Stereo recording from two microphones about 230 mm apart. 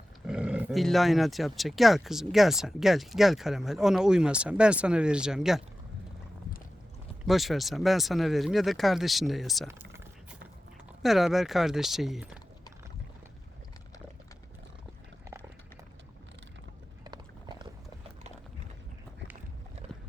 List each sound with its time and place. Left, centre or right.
0.3 s speech: centre
7.3 s speech: centre
11.0 s speech: centre
17.0 s clip-clop: centre